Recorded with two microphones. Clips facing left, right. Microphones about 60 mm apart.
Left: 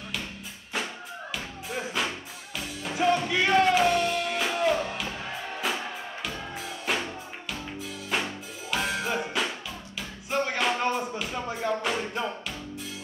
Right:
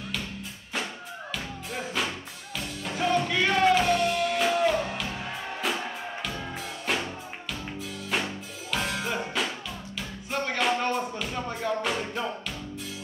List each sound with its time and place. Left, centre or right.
1.3 s music: centre